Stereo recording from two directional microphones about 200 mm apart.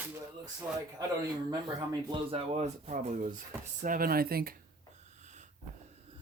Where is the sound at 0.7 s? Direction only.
10° right (ahead or behind).